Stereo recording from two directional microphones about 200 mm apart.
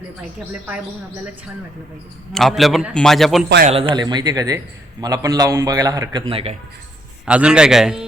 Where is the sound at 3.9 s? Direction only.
20° right (ahead or behind).